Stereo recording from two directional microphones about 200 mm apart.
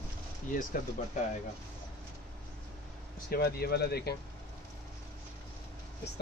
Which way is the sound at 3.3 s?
50° left (ahead or behind).